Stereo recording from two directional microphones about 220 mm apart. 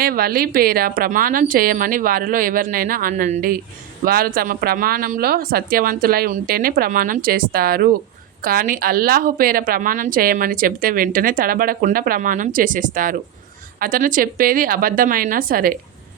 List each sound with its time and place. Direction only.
0.0 s a woman's voice: 45° right (ahead or behind)